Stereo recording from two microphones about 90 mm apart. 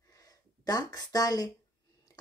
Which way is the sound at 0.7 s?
45° left (ahead or behind).